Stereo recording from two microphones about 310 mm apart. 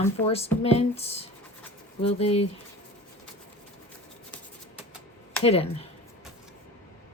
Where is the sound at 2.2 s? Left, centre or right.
Centre.